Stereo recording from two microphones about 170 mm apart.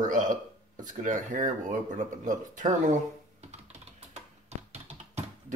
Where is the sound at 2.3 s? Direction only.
50° right (ahead or behind).